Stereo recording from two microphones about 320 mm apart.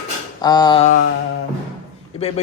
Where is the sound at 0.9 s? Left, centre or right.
Left.